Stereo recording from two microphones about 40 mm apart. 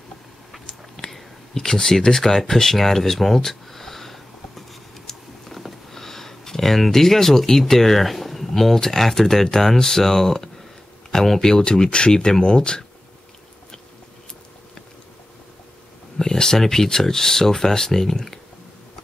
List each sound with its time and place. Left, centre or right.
0.9 s a sound: centre
11.1 s speech: centre
16.2 s speech: centre